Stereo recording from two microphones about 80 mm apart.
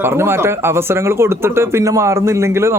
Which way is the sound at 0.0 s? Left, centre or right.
Right.